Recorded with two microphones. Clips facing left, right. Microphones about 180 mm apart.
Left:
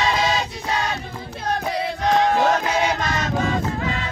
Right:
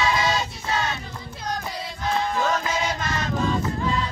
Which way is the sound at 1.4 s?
65° left (ahead or behind).